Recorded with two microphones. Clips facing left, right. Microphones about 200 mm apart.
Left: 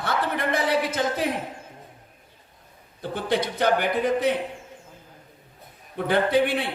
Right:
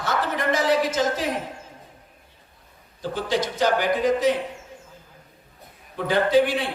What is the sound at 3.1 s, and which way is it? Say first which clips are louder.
A man's voice: even; 60° left (ahead or behind).